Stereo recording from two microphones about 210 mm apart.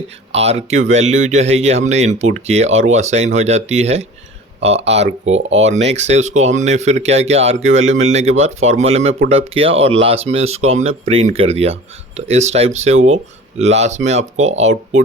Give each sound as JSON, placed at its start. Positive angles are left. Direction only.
{"t": 0.3, "sound": "speech", "side_deg": -30}